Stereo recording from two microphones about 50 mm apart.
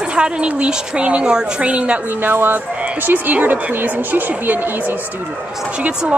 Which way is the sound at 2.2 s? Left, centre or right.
Right.